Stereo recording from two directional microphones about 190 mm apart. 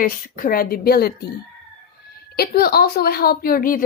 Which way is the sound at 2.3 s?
55° left (ahead or behind).